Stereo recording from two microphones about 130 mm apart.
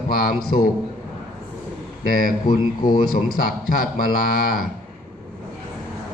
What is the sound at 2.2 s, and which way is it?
Speech, 90° left.